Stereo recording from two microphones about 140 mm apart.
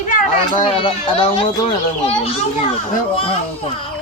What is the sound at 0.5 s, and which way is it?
Speech, 40° left (ahead or behind).